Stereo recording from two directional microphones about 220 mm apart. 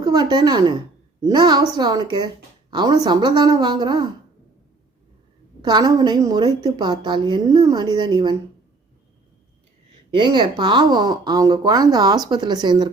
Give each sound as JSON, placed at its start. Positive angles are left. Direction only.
{"t": 0.0, "sound": "a woman's voice", "side_deg": -15}
{"t": 5.6, "sound": "a woman's voice", "side_deg": -15}
{"t": 10.1, "sound": "a woman's voice", "side_deg": -20}